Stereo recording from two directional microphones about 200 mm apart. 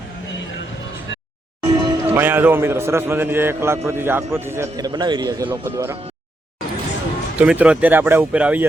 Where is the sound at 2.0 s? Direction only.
10° right (ahead or behind).